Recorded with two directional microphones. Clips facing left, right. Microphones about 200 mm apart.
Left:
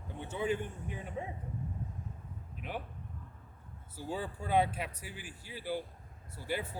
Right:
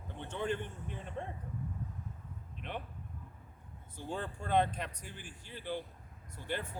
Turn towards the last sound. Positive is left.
turn(degrees=10)  # may be behind; listen again after turning